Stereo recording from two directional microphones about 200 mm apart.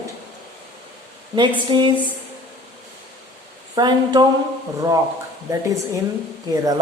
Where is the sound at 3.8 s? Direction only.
20° right (ahead or behind).